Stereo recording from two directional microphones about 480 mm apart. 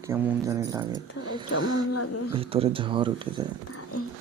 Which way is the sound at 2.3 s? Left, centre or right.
Centre.